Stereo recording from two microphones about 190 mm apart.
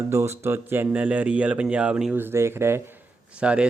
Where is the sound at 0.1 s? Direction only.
15° right (ahead or behind).